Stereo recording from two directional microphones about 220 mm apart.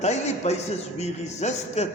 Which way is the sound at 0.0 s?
30° left (ahead or behind).